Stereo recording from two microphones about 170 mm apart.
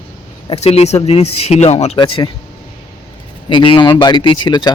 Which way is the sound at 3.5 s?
30° left (ahead or behind).